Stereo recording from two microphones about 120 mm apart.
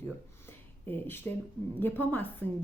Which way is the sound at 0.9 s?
15° left (ahead or behind).